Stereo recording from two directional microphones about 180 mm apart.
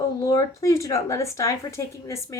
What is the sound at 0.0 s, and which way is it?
A woman's voice, 15° left (ahead or behind).